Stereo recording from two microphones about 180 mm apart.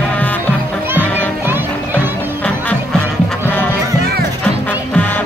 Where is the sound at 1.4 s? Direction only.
10° right (ahead or behind).